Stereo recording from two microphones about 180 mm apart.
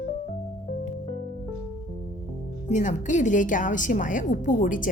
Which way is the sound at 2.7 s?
40° left (ahead or behind).